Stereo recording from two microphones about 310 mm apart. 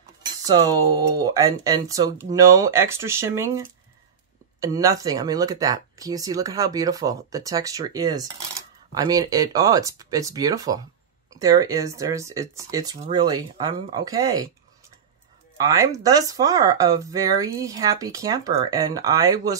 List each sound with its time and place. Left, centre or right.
0.2 s speech: centre
15.5 s speech: centre